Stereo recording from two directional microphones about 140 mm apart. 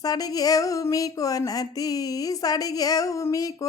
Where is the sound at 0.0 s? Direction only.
25° left (ahead or behind).